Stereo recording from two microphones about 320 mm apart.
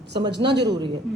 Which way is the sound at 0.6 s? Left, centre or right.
Centre.